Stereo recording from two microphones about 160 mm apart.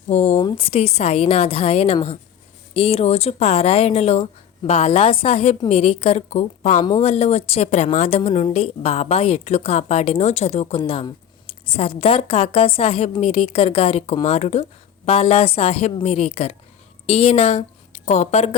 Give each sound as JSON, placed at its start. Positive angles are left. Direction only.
{"t": 0.1, "sound": "a woman's voice", "side_deg": 40}
{"t": 10.8, "sound": "a woman's voice", "side_deg": 30}